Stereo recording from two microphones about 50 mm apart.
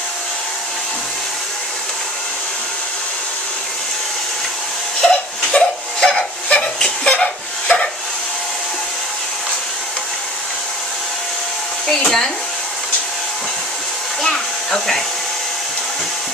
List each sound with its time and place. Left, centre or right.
5.0 s a sound: centre
12.0 s hair dryer: centre
14.2 s hair dryer: centre